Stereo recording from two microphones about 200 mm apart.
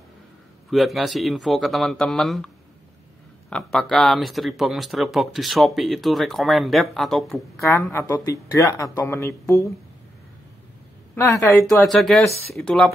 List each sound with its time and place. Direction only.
0.7 s speech: centre (ahead or behind)
7.6 s speech: 15° left (ahead or behind)
11.1 s speech: 10° left (ahead or behind)
11.5 s speech: centre (ahead or behind)